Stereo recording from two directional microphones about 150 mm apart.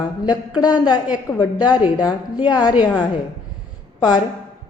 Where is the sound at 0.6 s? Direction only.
30° left (ahead or behind).